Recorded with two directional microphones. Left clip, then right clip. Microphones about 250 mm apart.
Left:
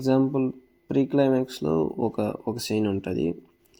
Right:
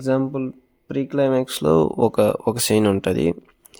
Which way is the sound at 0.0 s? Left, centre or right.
Right.